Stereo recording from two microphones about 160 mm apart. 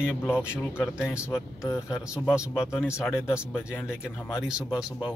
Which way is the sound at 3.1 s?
15° left (ahead or behind).